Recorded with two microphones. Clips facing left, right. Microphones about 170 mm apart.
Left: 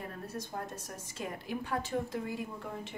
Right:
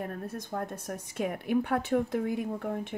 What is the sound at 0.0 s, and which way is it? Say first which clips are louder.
A woman's voice: right 5 dB; 55° right (ahead or behind).